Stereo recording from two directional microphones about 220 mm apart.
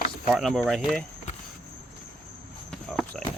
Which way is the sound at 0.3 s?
Centre (ahead or behind).